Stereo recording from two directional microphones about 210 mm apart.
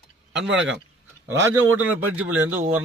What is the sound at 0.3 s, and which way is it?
Speech, 60° right (ahead or behind).